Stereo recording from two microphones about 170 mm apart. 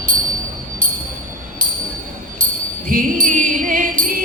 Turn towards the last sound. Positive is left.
turn(degrees=-55)  # may be behind; listen again after turning